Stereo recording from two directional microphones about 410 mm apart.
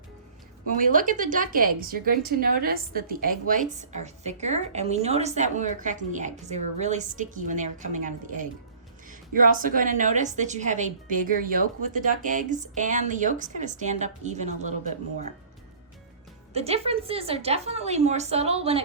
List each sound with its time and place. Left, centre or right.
0.8 s a woman's voice: centre
16.5 s a woman's voice: centre